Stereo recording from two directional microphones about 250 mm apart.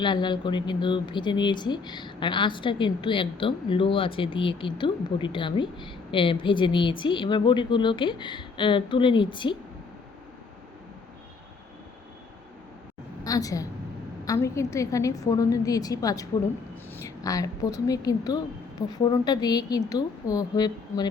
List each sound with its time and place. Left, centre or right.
0.0 s speech: centre
13.2 s a woman's voice: centre